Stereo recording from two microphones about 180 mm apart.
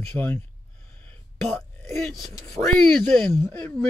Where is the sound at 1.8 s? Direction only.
15° left (ahead or behind).